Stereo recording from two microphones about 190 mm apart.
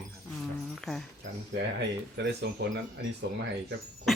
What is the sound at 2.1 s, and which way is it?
Speech, 65° right (ahead or behind).